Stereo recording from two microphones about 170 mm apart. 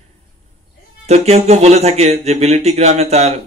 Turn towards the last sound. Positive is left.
turn(degrees=-40)  # may be behind; listen again after turning